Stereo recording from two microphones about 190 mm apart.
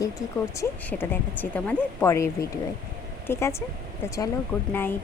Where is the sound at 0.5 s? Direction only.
15° left (ahead or behind).